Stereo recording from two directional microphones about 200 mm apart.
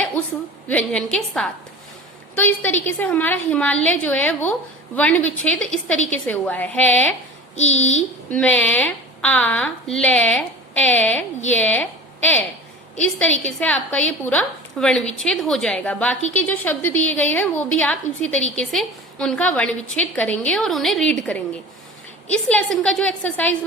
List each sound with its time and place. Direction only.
0.7 s a woman's voice: 5° left (ahead or behind)
7.7 s a woman's voice: 35° left (ahead or behind)
8.3 s a woman's voice: 5° left (ahead or behind)